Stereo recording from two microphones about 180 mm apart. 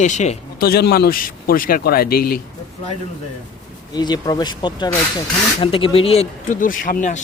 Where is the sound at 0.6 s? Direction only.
60° left (ahead or behind).